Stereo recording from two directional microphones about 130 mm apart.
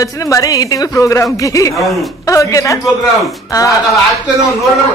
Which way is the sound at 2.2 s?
25° left (ahead or behind).